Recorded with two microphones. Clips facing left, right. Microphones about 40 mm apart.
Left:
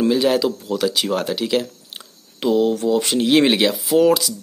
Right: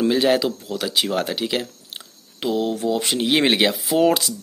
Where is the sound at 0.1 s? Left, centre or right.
Centre.